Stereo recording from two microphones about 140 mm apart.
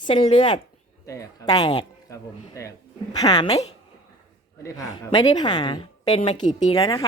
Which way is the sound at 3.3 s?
45° left (ahead or behind).